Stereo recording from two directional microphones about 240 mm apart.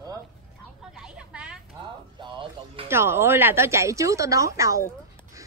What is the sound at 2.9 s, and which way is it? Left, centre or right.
A woman's voice, centre.